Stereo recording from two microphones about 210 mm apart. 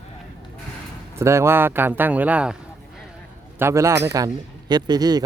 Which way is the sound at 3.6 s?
15° right (ahead or behind).